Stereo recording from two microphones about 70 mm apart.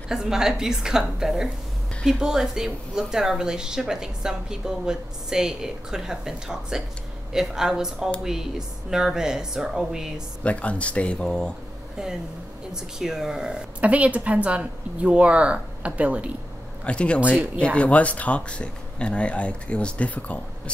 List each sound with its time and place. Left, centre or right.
0.1 s speech: centre
10.4 s speech: centre
12.7 s speech: centre
16.8 s speech: centre